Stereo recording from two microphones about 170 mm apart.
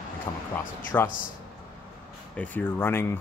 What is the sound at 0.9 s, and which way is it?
Speech, 15° left (ahead or behind).